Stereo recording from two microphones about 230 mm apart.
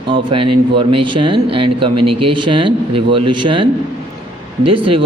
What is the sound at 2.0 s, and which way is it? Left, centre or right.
Speech, right.